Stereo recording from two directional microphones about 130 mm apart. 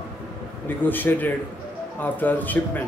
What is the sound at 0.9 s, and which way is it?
A man's voice, 15° left (ahead or behind).